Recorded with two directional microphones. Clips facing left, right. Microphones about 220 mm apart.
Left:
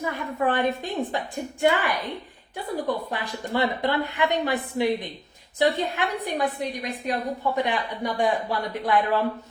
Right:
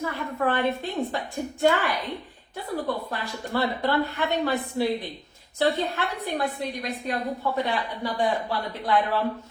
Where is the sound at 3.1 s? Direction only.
15° left (ahead or behind).